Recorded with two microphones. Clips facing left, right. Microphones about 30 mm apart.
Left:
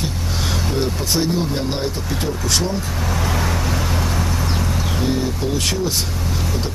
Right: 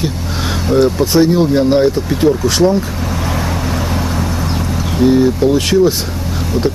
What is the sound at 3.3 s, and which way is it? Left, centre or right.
Vehicle, centre.